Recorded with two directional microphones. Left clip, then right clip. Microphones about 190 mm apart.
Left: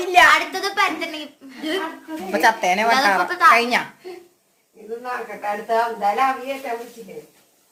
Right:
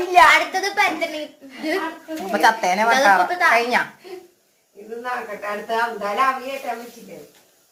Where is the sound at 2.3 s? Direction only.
25° left (ahead or behind).